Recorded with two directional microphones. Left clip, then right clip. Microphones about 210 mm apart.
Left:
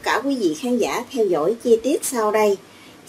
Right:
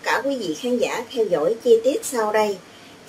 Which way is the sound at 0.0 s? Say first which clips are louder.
Left 2 dB; 40° left (ahead or behind).